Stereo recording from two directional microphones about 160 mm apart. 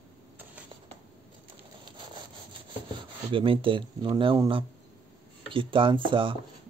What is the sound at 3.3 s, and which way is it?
Speech, 35° right (ahead or behind).